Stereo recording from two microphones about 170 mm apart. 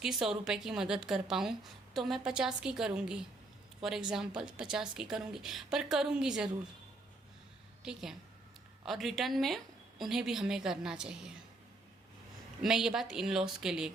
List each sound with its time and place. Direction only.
0.0 s a woman's voice: centre (ahead or behind)
7.8 s a woman's voice: 5° right (ahead or behind)
12.6 s a woman's voice: 5° right (ahead or behind)